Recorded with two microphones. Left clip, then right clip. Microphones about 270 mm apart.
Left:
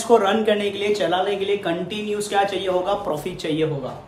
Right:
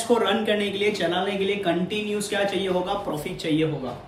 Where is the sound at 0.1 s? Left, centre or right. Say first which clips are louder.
Left 5 dB; centre.